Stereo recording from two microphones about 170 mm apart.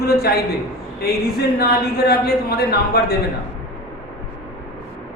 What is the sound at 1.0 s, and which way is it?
Speech, 65° left (ahead or behind).